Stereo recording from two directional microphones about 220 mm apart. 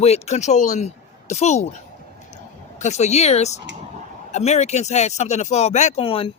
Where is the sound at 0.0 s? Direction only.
30° left (ahead or behind).